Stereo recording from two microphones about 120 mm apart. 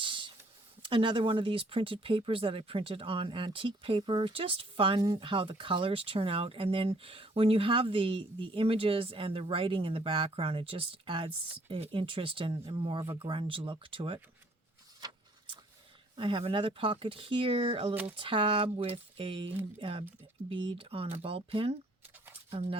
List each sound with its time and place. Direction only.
0.0 s a sound: 45° right (ahead or behind)
0.8 s speech: 45° right (ahead or behind)
16.1 s speech: 45° right (ahead or behind)